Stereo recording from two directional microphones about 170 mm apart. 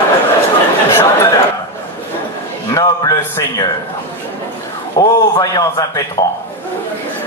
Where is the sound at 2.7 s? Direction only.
25° left (ahead or behind).